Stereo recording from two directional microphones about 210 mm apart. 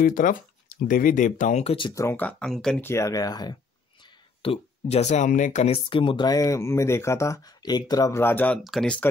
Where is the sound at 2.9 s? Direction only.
15° left (ahead or behind).